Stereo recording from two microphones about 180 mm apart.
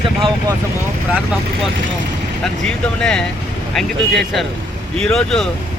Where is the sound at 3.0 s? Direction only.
5° left (ahead or behind).